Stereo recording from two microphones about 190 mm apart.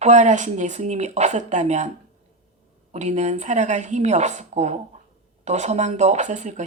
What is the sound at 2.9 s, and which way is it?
Speech, 35° right (ahead or behind).